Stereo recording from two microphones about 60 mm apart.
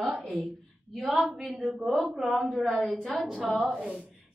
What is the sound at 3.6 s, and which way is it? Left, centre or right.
Speech, centre.